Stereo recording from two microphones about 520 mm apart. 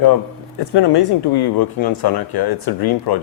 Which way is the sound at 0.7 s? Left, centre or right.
Left.